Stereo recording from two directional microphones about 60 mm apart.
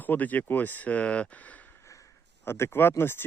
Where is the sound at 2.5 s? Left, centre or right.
Left.